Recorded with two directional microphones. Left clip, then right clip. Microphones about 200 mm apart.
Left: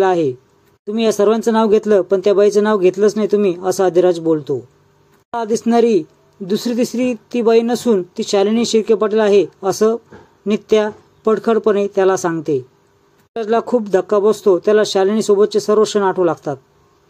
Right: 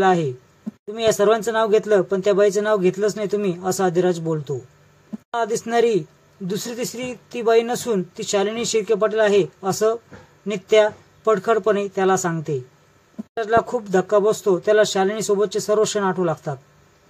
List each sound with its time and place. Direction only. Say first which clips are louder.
0.0 s a man's voice: left 4 dB; 25° left (ahead or behind)